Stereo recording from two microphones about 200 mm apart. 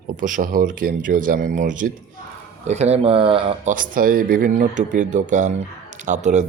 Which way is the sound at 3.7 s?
45° right (ahead or behind).